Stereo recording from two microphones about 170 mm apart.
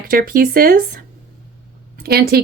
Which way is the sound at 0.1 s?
55° right (ahead or behind).